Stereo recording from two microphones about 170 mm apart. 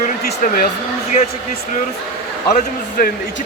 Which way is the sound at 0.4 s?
60° left (ahead or behind).